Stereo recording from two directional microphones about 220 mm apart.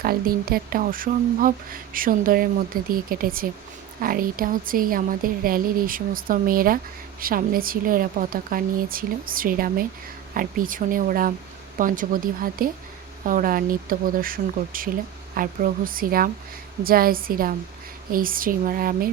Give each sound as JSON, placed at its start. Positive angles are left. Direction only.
{"t": 0.0, "sound": "speech", "side_deg": -40}